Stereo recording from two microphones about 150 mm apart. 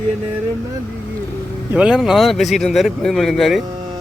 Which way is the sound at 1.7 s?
5° right (ahead or behind).